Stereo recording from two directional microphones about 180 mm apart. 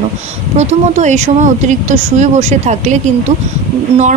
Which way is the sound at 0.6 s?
40° right (ahead or behind).